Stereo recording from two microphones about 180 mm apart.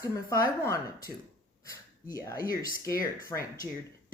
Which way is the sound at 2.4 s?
50° left (ahead or behind).